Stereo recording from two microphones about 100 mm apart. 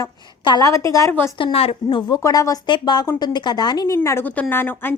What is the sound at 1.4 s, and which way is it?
Speech, 65° left (ahead or behind).